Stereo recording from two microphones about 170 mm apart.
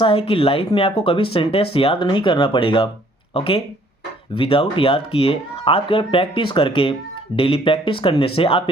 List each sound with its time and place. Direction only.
0.0 s speech: 30° left (ahead or behind)